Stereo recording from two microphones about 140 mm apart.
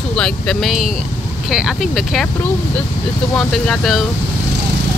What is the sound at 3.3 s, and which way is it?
Speech, 5° left (ahead or behind).